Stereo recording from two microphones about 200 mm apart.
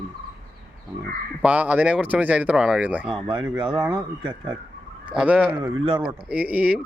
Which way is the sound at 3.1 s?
25° right (ahead or behind).